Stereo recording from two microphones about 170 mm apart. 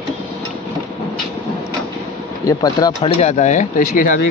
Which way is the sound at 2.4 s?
20° left (ahead or behind).